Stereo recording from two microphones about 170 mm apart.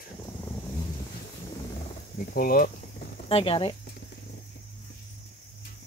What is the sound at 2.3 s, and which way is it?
Speech, 60° left (ahead or behind).